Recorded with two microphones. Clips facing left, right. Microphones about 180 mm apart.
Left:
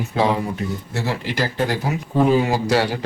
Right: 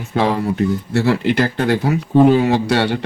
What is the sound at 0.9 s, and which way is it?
Speech, 65° right (ahead or behind).